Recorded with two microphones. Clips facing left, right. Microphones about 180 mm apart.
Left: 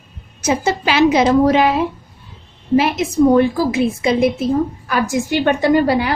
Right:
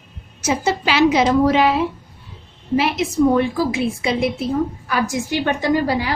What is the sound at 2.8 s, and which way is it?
A woman's voice, 45° left (ahead or behind).